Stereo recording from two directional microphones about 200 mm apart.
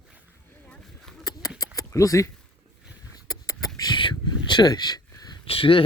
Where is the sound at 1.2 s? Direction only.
20° left (ahead or behind).